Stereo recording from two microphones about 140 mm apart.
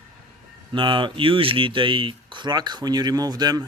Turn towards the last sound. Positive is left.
turn(degrees=-30)  # may be behind; listen again after turning